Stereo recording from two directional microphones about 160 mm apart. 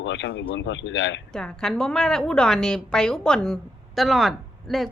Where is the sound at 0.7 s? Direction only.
90° left.